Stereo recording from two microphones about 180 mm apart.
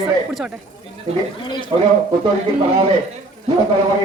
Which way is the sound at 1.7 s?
25° right (ahead or behind).